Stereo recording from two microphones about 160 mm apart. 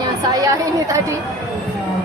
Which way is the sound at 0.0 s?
25° right (ahead or behind).